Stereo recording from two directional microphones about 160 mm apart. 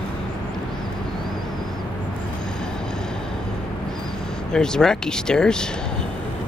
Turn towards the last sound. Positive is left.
turn(degrees=5)  # may be behind; listen again after turning